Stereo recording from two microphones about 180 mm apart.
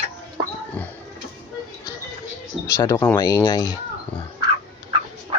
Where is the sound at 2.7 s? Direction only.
15° left (ahead or behind).